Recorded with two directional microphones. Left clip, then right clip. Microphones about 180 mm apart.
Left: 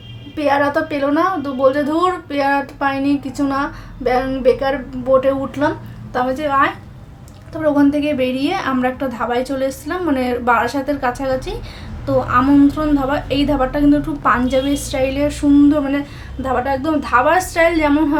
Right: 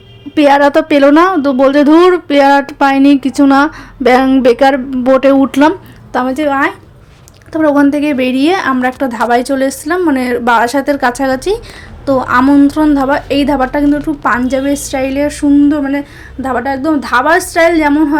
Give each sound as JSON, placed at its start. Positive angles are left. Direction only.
{"t": 0.3, "sound": "a woman's voice", "side_deg": -50}